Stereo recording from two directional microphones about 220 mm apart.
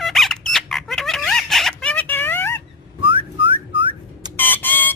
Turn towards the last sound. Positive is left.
turn(degrees=10)  # may be behind; listen again after turning